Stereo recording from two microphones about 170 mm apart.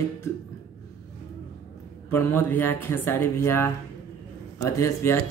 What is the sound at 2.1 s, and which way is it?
Speech, 15° left (ahead or behind).